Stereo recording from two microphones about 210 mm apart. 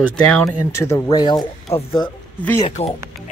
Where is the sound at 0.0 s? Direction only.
5° left (ahead or behind).